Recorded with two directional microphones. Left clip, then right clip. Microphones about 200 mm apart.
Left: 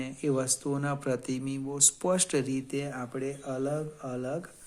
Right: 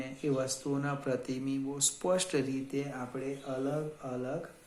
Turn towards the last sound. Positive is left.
turn(degrees=55)  # may be behind; listen again after turning